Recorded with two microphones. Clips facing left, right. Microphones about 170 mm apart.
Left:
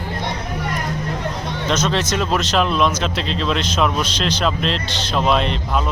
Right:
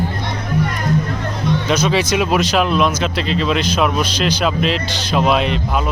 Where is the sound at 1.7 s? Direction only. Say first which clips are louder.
Right 2 dB; 10° right (ahead or behind).